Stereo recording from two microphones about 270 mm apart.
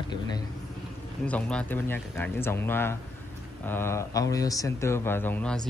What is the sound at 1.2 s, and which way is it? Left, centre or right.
Speech, centre.